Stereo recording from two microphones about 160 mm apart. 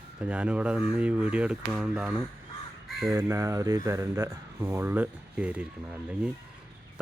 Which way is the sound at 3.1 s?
20° right (ahead or behind).